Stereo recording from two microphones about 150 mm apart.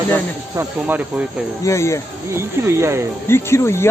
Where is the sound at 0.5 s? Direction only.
10° right (ahead or behind).